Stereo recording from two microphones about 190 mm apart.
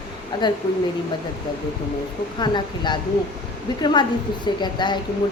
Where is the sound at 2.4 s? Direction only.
25° left (ahead or behind).